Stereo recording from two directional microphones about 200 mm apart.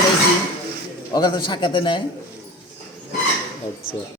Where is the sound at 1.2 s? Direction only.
20° left (ahead or behind).